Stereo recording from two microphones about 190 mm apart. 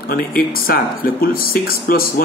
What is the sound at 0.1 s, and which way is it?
Speech, 50° left (ahead or behind).